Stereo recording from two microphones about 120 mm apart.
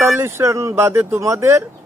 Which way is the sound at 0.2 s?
20° right (ahead or behind).